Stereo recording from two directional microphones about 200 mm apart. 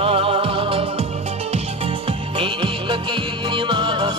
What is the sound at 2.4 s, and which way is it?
Music, 25° right (ahead or behind).